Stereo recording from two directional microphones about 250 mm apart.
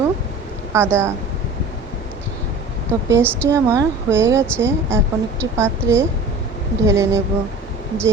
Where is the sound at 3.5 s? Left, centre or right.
Centre.